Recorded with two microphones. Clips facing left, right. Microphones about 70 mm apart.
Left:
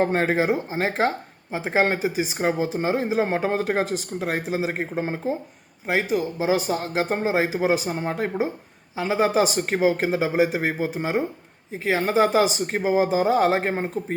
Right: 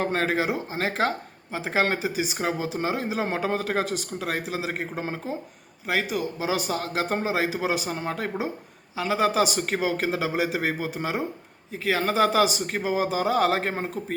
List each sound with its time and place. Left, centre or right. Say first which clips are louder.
0.0 s speech: left 4 dB; left